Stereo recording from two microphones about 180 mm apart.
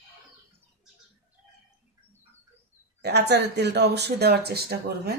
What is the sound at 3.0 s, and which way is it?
Speech, 70° right (ahead or behind).